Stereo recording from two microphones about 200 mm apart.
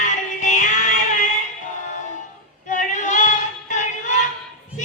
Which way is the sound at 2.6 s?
40° left (ahead or behind).